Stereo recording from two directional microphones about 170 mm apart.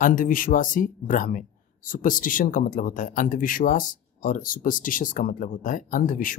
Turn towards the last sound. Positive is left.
turn(degrees=55)  # may be behind; listen again after turning